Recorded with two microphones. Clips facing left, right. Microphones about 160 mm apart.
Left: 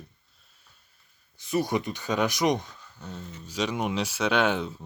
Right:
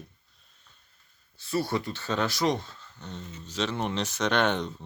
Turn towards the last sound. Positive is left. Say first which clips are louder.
# left 1 dB
turn(degrees=5)  # may be behind; listen again after turning